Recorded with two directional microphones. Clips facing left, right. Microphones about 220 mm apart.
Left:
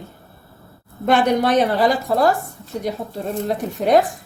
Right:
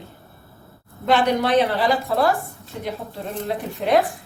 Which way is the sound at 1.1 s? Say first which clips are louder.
Left 2 dB; 45° left (ahead or behind).